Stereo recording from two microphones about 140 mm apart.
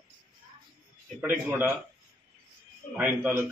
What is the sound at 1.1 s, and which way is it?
Speech, 10° right (ahead or behind).